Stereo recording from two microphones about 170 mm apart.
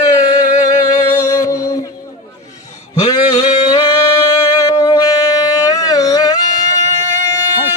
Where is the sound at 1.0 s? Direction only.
15° left (ahead or behind).